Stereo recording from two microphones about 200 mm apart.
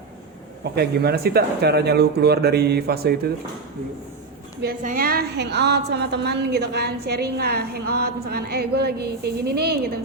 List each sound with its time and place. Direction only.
0.6 s a woman's voice: 55° right (ahead or behind)
4.8 s a woman's voice: 45° right (ahead or behind)